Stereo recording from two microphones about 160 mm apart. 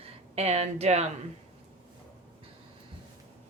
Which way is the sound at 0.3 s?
40° right (ahead or behind).